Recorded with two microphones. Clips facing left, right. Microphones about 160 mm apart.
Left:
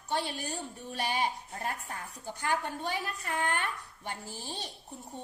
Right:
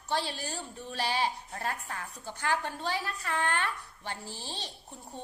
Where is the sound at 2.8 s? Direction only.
15° left (ahead or behind).